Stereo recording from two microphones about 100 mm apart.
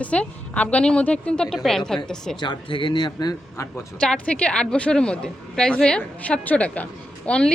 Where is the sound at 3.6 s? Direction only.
25° left (ahead or behind).